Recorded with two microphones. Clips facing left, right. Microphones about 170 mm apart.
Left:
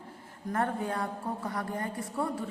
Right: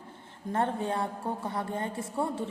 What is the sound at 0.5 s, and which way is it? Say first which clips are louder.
A woman's voice: right 2 dB; 25° right (ahead or behind).